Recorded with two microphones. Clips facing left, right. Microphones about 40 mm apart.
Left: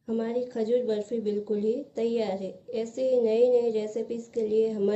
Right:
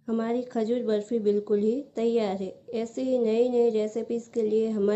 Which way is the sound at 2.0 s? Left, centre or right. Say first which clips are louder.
Right 3 dB; right.